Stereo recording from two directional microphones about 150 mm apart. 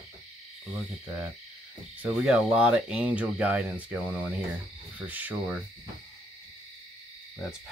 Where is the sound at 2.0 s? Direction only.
10° right (ahead or behind).